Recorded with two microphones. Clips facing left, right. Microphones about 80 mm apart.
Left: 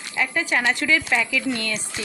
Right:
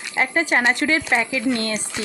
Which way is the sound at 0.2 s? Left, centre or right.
Right.